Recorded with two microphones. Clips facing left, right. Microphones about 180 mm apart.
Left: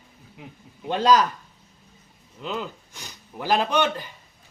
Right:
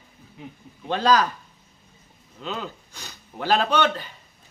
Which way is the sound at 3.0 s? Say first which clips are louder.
Right 1 dB; 10° left (ahead or behind).